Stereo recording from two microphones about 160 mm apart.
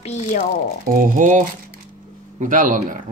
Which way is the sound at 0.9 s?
55° right (ahead or behind).